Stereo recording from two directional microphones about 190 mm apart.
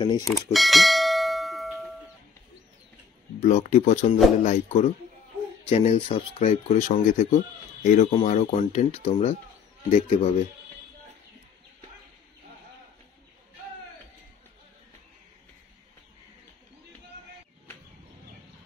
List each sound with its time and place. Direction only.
0.0 s speech: 20° left (ahead or behind)
0.3 s bell: centre (ahead or behind)
3.4 s speech: 40° left (ahead or behind)